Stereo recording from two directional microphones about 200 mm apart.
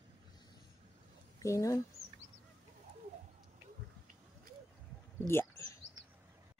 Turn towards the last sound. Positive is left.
turn(degrees=10)  # may be behind; listen again after turning